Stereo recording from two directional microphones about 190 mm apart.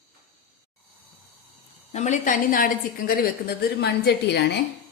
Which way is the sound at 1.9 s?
40° left (ahead or behind).